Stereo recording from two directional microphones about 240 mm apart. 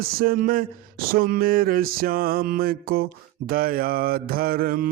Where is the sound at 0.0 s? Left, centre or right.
Right.